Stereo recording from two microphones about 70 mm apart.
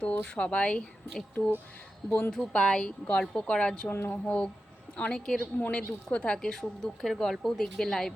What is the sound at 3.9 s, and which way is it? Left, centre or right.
Speech, left.